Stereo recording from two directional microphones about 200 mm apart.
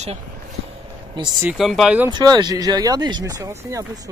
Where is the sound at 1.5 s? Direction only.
Centre (ahead or behind).